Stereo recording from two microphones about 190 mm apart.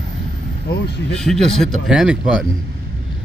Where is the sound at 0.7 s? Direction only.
55° left (ahead or behind).